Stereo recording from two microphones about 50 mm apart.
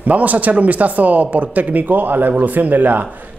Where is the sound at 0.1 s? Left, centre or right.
Right.